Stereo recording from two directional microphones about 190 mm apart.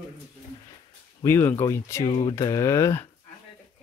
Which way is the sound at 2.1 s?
25° left (ahead or behind).